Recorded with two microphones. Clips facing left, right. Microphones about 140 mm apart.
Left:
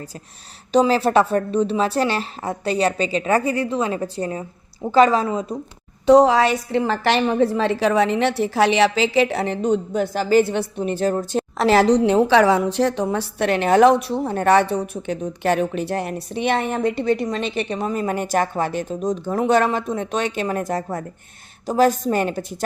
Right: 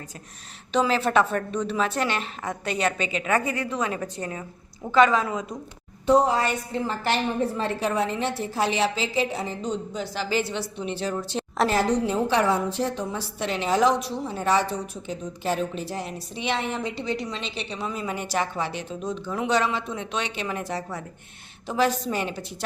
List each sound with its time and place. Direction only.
0.7 s a woman's voice: 35° left (ahead or behind)
6.1 s a woman's voice: 90° left; by 11.4 s 45° left (ahead or behind)
11.7 s a woman's voice: 85° left; by 22.5 s 45° left (ahead or behind)